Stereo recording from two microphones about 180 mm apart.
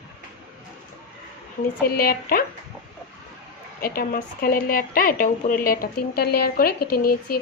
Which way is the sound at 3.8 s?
55° left (ahead or behind).